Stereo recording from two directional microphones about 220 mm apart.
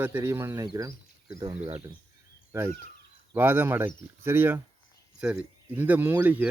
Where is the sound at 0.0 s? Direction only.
10° right (ahead or behind).